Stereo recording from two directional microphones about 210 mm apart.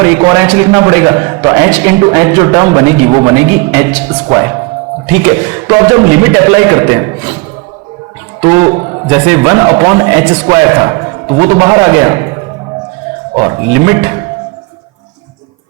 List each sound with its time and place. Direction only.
0.0 s a man's voice: 15° right (ahead or behind)
8.4 s a man's voice: 20° right (ahead or behind)
13.3 s a man's voice: 15° right (ahead or behind)